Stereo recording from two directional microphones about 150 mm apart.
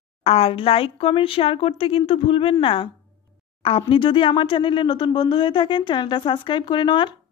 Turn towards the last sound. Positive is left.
turn(degrees=30)  # may be behind; listen again after turning